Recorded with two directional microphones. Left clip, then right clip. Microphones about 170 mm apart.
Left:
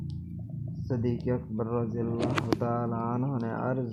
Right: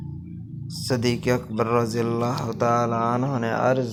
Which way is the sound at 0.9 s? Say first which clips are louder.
Right 8 dB; 20° right (ahead or behind).